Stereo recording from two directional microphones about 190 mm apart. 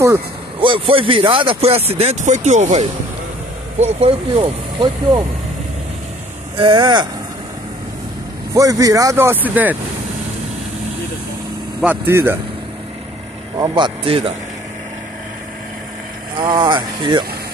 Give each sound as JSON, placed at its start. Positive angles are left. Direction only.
{"t": 0.6, "sound": "speech", "side_deg": -25}
{"t": 6.5, "sound": "speech", "side_deg": -25}
{"t": 8.5, "sound": "speech", "side_deg": -20}
{"t": 11.8, "sound": "speech", "side_deg": -10}
{"t": 13.6, "sound": "speech", "side_deg": -25}
{"t": 16.3, "sound": "speech", "side_deg": -25}